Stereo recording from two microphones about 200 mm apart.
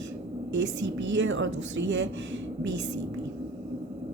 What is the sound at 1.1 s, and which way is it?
A woman's voice, 65° right (ahead or behind).